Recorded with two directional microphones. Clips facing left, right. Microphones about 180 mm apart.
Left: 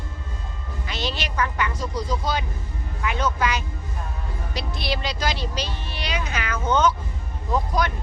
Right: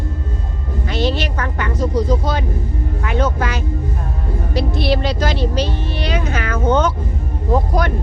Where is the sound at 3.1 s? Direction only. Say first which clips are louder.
Right 5 dB; 50° right (ahead or behind).